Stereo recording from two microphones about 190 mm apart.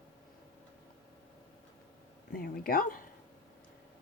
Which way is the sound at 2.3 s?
50° left (ahead or behind).